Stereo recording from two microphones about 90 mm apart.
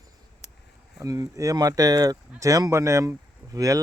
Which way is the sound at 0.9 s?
40° right (ahead or behind).